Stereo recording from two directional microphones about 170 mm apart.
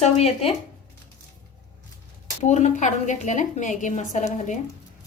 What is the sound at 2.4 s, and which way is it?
A woman's voice, 45° left (ahead or behind).